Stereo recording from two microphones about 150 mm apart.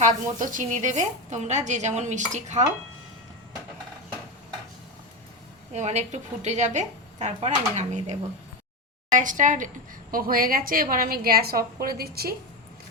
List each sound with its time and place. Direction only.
0.3 s speech: 60° right (ahead or behind)
5.7 s a woman's voice: 50° right (ahead or behind)
10.1 s a woman's voice: 70° right (ahead or behind); by 12.3 s 90° right